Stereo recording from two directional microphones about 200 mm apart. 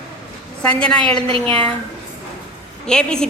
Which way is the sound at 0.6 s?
5° left (ahead or behind).